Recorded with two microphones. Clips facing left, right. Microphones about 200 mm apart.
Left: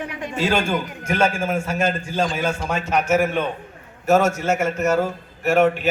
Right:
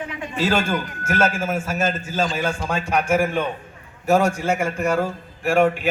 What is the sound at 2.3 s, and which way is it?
Speech, 10° left (ahead or behind).